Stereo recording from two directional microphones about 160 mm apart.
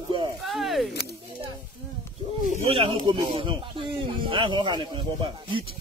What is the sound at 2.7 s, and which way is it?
Speech, 30° right (ahead or behind).